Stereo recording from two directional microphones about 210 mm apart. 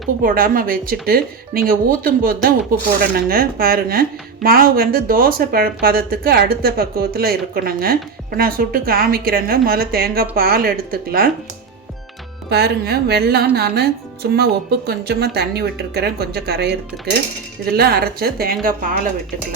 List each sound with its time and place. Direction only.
0.2 s speech: 40° right (ahead or behind)
12.5 s speech: 50° right (ahead or behind)